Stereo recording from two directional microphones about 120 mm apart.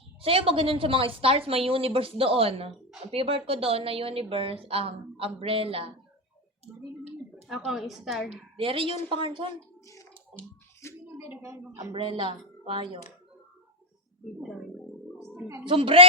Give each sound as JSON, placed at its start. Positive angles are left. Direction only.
{"t": 0.2, "sound": "speech", "side_deg": -50}
{"t": 6.7, "sound": "a woman's voice", "side_deg": -5}
{"t": 8.5, "sound": "speech", "side_deg": -50}
{"t": 9.8, "sound": "a sound", "side_deg": 25}
{"t": 11.2, "sound": "a woman's voice", "side_deg": -20}
{"t": 11.9, "sound": "speech", "side_deg": -50}
{"t": 15.6, "sound": "speech", "side_deg": -45}